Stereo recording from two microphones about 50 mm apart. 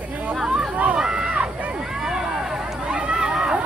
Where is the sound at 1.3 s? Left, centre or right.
Right.